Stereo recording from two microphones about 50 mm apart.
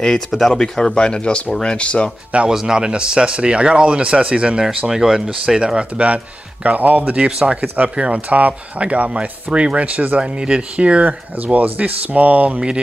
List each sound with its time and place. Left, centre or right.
0.5 s speech: centre
2.5 s speech: centre
4.6 s speech: centre; by 7.2 s right
7.2 s speech: centre
7.6 s speech: right
12.5 s speech: centre